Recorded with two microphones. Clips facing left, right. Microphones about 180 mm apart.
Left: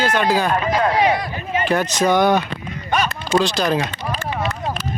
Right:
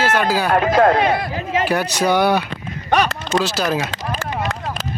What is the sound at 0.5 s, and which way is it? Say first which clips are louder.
Speech: right 4 dB; 55° right (ahead or behind).